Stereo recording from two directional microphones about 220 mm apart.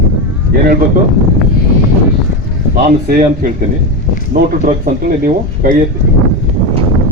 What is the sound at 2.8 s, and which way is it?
Speech, 40° right (ahead or behind).